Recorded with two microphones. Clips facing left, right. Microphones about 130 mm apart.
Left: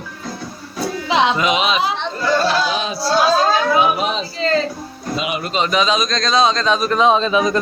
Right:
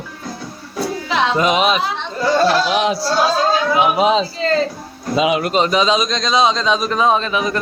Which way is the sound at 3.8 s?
90° right.